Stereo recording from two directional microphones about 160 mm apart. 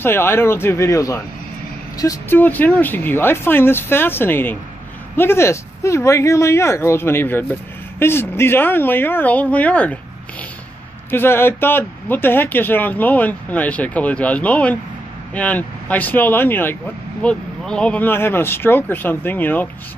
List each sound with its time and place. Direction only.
0.0 s speech: 15° left (ahead or behind)
11.1 s speech: 15° left (ahead or behind)